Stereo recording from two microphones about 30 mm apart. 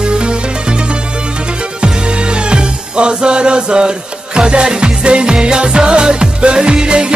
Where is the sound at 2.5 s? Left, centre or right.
Right.